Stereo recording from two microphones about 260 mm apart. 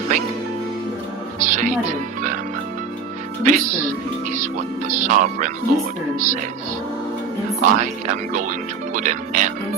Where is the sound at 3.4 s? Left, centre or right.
Right.